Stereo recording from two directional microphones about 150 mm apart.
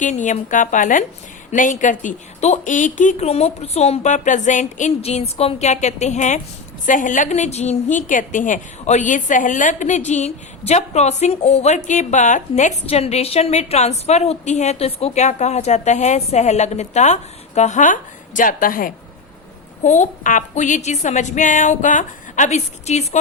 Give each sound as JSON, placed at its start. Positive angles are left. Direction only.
{"t": 0.0, "sound": "a woman's voice", "side_deg": 55}
{"t": 19.8, "sound": "a woman's voice", "side_deg": 55}